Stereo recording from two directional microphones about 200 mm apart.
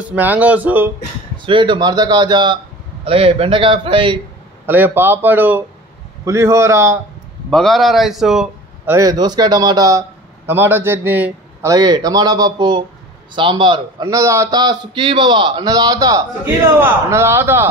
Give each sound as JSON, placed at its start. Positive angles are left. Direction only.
{"t": 0.0, "sound": "speech", "side_deg": -10}
{"t": 1.4, "sound": "a man's voice", "side_deg": -25}
{"t": 4.6, "sound": "speech", "side_deg": -10}
{"t": 7.5, "sound": "a man's voice", "side_deg": 0}
{"t": 8.9, "sound": "a man's voice", "side_deg": -20}